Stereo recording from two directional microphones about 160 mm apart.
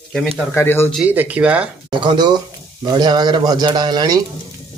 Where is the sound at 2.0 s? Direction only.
30° right (ahead or behind).